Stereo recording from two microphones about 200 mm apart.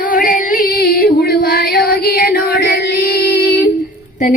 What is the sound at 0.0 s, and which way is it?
Music, 45° left (ahead or behind).